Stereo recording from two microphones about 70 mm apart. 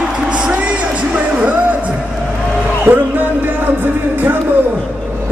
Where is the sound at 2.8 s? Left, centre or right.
Right.